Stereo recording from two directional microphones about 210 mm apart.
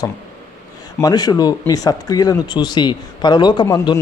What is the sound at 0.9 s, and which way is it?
A man's voice, 15° left (ahead or behind).